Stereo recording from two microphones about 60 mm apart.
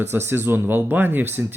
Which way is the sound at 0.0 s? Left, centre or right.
Right.